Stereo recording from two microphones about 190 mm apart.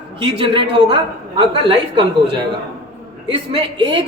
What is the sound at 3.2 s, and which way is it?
Speech, 25° right (ahead or behind).